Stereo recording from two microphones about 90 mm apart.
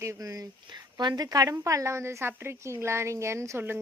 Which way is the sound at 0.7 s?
55° right (ahead or behind).